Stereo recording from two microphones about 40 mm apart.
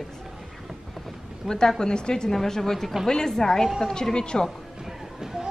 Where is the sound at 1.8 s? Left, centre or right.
Left.